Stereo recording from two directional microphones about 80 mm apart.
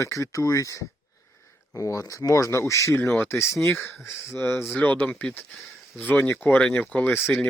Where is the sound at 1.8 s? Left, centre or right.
Left.